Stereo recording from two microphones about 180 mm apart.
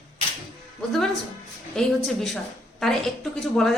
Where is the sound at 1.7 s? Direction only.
Centre (ahead or behind).